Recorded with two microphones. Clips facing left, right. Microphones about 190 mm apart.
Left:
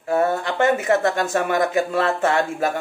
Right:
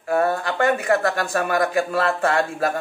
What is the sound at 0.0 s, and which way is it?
Speech, 25° left (ahead or behind).